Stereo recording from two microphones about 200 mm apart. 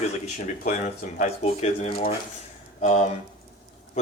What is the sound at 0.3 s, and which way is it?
Speech, 40° left (ahead or behind).